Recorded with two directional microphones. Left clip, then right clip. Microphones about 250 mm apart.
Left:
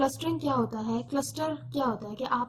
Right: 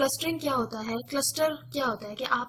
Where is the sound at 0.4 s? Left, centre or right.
Right.